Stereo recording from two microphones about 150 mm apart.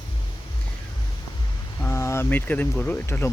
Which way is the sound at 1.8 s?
15° left (ahead or behind).